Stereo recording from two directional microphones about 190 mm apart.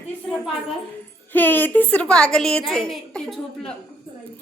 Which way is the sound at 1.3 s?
10° left (ahead or behind).